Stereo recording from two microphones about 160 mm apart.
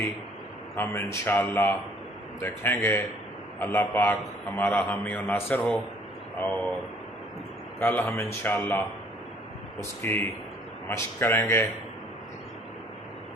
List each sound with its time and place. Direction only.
0.8 s a man's voice: 15° left (ahead or behind)
7.8 s a man's voice: 15° left (ahead or behind)
10.0 s a man's voice: 15° left (ahead or behind)